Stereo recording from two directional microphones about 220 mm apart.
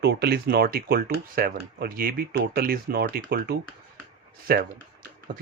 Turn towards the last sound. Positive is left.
turn(degrees=-45)  # may be behind; listen again after turning